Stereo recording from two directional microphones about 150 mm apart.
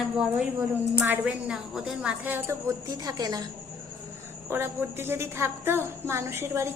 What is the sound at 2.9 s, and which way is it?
Speech, 25° right (ahead or behind).